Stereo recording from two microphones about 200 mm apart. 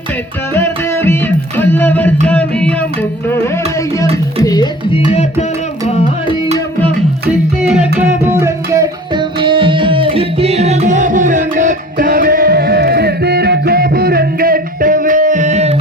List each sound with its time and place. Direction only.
0.5 s music: 10° left (ahead or behind)
7.7 s music: 5° right (ahead or behind); by 15.7 s 35° right (ahead or behind)